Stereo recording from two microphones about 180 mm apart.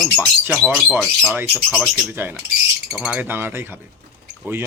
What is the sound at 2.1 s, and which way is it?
Speech, 10° right (ahead or behind).